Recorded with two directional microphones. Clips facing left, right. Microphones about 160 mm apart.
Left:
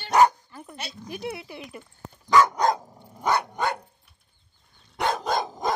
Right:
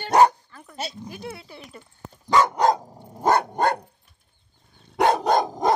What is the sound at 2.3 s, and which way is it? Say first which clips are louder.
Dog: right 1 dB; 30° right (ahead or behind).